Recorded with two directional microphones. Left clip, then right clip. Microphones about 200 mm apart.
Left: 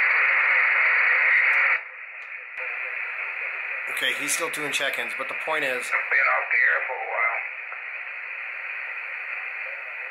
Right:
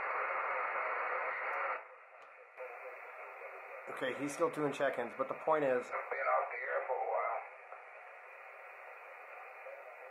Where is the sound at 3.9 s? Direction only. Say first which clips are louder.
Left 12 dB; 5° right (ahead or behind).